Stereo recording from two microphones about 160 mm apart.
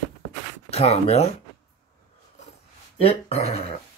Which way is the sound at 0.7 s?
40° left (ahead or behind).